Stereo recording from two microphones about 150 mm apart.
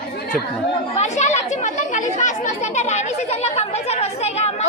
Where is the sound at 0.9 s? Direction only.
50° left (ahead or behind).